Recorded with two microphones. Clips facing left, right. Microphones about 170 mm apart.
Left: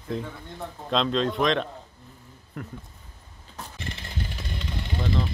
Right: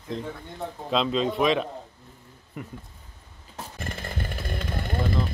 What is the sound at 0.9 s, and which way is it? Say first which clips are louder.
Speech: even; 5° right (ahead or behind).